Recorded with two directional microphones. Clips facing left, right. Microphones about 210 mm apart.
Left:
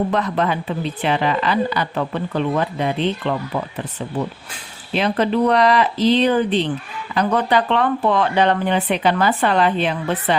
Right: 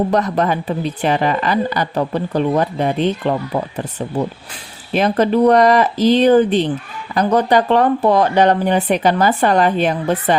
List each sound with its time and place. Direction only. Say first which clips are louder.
0.1 s speech: right 3 dB; 40° right (ahead or behind)